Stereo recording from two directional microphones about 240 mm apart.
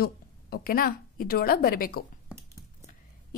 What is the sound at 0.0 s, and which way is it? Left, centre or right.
A woman's voice, left.